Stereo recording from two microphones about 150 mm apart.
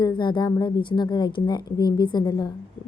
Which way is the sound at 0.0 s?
30° left (ahead or behind).